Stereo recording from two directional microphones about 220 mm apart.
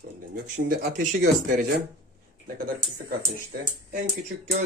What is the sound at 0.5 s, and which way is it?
Speech, 40° right (ahead or behind).